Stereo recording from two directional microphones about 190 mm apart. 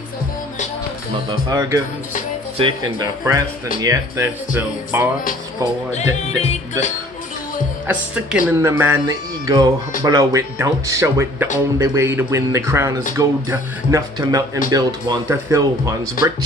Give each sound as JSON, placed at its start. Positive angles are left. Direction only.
{"t": 1.5, "sound": "speech", "side_deg": -15}
{"t": 5.9, "sound": "music", "side_deg": 35}
{"t": 7.8, "sound": "speech", "side_deg": -5}